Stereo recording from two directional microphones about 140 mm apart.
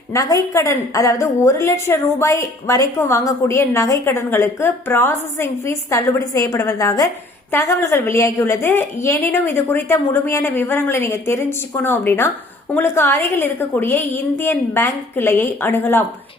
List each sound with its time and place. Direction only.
0.1 s a woman's voice: 25° left (ahead or behind)